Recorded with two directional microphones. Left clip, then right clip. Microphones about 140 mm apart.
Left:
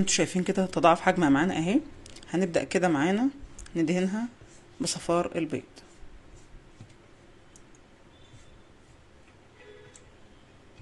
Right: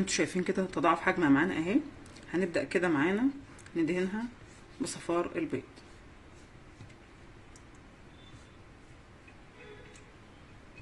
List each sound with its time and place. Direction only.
0.1 s speech: 45° left (ahead or behind); by 1.8 s 65° left (ahead or behind)
2.3 s speech: 50° left (ahead or behind)